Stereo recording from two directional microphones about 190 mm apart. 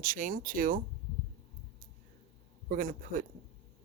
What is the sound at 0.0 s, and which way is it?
Speech, 45° right (ahead or behind).